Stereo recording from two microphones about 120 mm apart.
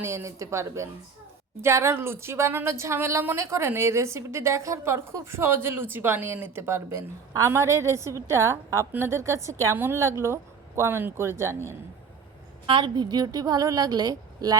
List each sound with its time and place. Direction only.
0.0 s speech: 20° right (ahead or behind)
12.6 s a woman's voice: 40° right (ahead or behind)